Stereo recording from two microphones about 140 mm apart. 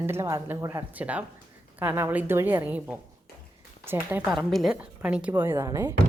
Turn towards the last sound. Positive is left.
turn(degrees=-25)  # may be behind; listen again after turning